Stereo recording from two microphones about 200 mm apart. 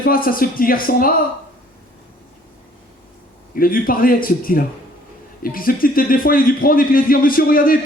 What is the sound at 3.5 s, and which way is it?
Speech, 45° left (ahead or behind).